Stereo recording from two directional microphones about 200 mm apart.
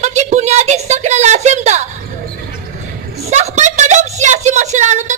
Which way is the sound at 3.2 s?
35° right (ahead or behind).